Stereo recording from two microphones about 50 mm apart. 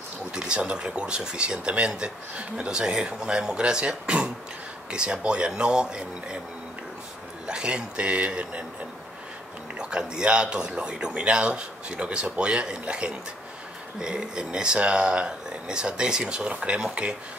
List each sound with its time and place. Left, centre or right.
0.3 s speech: centre
7.4 s speech: centre
9.8 s speech: centre